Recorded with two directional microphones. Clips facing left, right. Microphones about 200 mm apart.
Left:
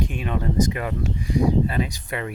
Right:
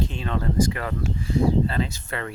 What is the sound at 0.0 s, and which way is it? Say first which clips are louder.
Speech: left 1 dB; 15° left (ahead or behind).